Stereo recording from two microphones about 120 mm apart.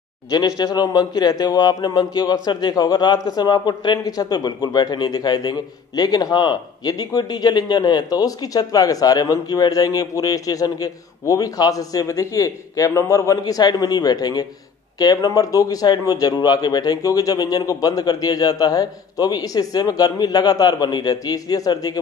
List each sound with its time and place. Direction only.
0.3 s a man's voice: 35° left (ahead or behind)